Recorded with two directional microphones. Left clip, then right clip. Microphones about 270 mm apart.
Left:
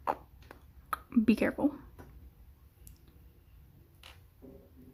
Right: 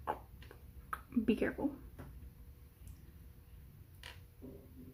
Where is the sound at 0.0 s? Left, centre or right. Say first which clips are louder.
Left 7 dB; left.